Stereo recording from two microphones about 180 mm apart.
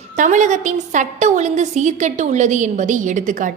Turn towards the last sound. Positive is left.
turn(degrees=-45)  # may be behind; listen again after turning